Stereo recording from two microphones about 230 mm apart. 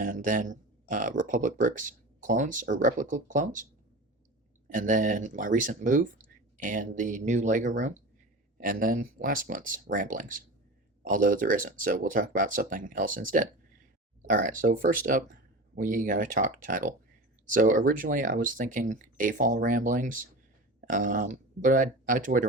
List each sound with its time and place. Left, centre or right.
0.0 s speech: right
4.7 s speech: right